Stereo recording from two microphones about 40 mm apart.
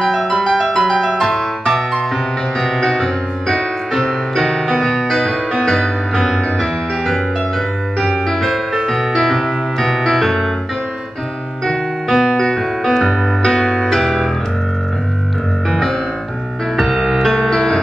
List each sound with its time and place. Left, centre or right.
0.0 s music: centre
8.0 s music: centre
12.1 s music: centre
12.4 s music: centre
12.8 s music: centre
15.7 s music: centre
16.8 s music: centre